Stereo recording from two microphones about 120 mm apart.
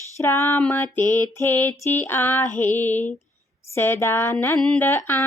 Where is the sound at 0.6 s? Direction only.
15° left (ahead or behind).